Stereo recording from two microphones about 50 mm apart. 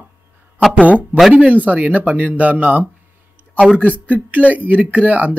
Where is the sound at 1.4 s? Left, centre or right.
Right.